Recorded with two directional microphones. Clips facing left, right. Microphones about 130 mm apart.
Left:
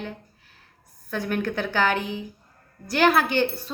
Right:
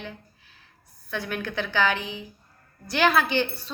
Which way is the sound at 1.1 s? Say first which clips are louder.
Left 4 dB; 45° left (ahead or behind).